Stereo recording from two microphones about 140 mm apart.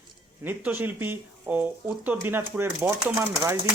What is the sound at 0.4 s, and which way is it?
Speech, 15° right (ahead or behind).